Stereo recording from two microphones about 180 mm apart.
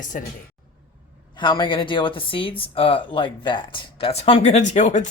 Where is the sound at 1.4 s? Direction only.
25° left (ahead or behind).